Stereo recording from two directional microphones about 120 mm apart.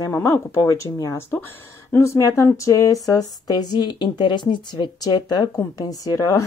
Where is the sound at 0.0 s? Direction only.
20° left (ahead or behind).